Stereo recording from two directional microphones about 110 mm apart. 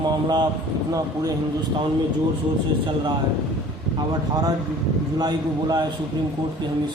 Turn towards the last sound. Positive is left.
turn(degrees=-35)  # may be behind; listen again after turning